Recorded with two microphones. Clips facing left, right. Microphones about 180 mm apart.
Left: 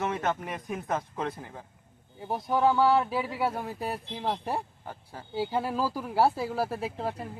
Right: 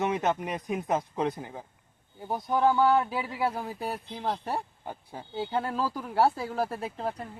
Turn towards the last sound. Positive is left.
turn(degrees=5)  # may be behind; listen again after turning